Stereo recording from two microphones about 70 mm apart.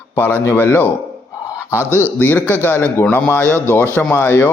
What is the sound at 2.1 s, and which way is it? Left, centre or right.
Speech, left.